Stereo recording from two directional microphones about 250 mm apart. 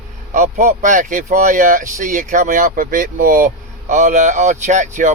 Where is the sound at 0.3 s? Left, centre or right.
Right.